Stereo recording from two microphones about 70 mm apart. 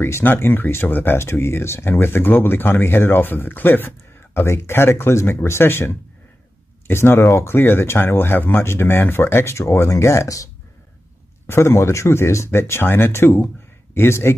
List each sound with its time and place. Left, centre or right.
0.0 s speech: left
11.4 s speech: left